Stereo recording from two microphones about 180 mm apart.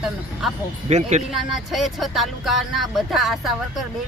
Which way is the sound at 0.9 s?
40° right (ahead or behind).